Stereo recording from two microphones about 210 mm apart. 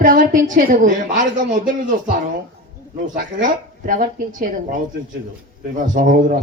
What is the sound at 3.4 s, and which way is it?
A woman's voice, 40° right (ahead or behind).